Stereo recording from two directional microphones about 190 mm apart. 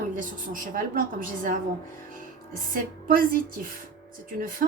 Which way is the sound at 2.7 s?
45° right (ahead or behind).